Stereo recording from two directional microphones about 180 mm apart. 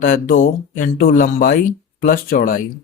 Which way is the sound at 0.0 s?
50° left (ahead or behind).